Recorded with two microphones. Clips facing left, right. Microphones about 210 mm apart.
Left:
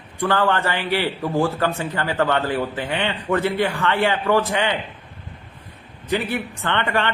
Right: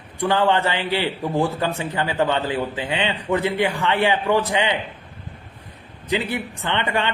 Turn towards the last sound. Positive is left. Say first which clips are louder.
# left 1 dB
turn(degrees=-15)  # may be behind; listen again after turning